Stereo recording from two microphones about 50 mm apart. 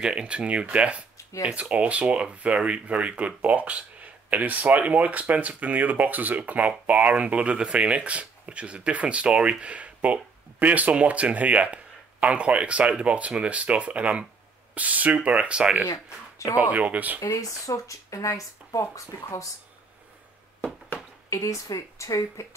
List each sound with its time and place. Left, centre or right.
0.0 s speech: right
17.3 s speech: left
21.3 s speech: left